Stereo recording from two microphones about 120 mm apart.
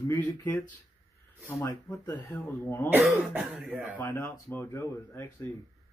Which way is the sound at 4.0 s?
20° left (ahead or behind).